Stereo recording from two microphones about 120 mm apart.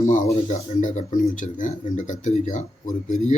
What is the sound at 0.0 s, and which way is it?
Speech, 90° left.